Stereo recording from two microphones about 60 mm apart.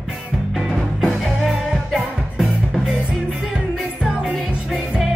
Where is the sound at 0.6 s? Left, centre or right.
Centre.